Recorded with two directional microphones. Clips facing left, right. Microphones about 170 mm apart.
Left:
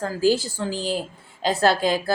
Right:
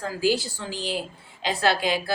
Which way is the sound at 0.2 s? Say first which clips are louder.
Left 4 dB; 45° left (ahead or behind).